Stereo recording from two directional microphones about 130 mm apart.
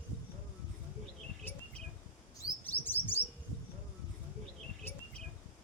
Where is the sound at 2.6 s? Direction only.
15° left (ahead or behind).